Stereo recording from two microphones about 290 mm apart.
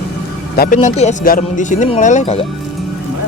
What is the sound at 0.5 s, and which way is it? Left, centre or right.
Speech, left.